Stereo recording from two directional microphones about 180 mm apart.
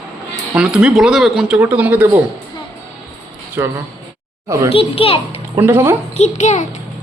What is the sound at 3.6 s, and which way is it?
Speech, 15° right (ahead or behind).